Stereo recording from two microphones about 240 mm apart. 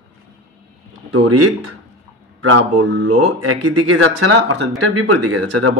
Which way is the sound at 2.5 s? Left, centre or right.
Right.